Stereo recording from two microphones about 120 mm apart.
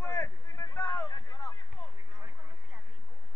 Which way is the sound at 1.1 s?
35° left (ahead or behind).